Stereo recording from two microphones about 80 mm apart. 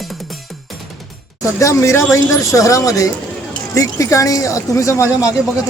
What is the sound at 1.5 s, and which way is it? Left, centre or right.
Speech, left.